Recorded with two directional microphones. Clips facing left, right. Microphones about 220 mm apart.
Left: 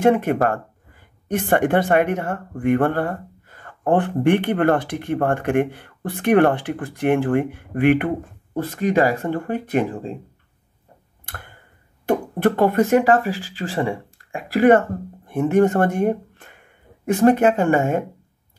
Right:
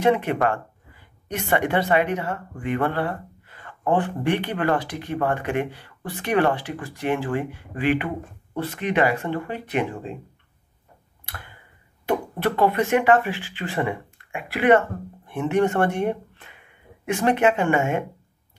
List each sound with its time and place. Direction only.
0.0 s speech: 45° left (ahead or behind)
8.5 s speech: 40° left (ahead or behind)
11.2 s tick-tock: 50° left (ahead or behind)
12.1 s speech: 45° left (ahead or behind)